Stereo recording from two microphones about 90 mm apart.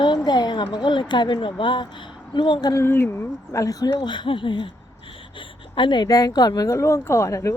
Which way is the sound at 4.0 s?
60° left (ahead or behind).